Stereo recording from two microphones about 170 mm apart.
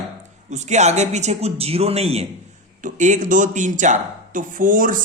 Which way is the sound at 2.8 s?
50° right (ahead or behind).